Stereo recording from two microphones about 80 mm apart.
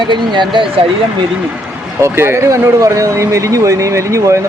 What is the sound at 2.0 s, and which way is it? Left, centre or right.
Speech, right.